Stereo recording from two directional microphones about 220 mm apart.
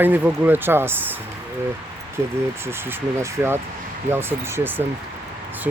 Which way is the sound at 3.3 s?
10° right (ahead or behind).